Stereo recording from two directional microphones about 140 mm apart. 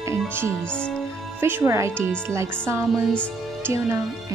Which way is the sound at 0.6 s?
5° left (ahead or behind).